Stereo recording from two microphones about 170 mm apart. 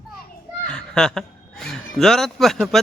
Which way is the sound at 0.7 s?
5° left (ahead or behind).